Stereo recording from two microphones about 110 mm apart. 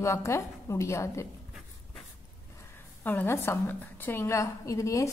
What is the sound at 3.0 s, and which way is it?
A woman's voice, 15° left (ahead or behind).